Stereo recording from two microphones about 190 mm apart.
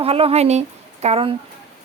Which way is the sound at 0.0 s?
30° right (ahead or behind).